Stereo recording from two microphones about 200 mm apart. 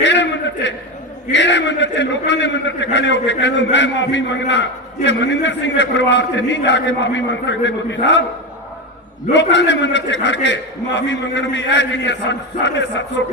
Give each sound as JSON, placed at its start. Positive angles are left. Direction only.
{"t": 0.0, "sound": "a sound", "side_deg": 60}
{"t": 1.3, "sound": "a man's voice", "side_deg": 60}
{"t": 9.3, "sound": "a man's voice", "side_deg": 60}